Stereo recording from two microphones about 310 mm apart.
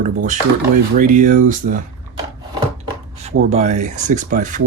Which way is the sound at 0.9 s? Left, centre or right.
Right.